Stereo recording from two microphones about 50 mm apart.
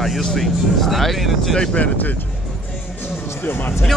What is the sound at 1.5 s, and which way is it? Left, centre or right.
Speech, centre.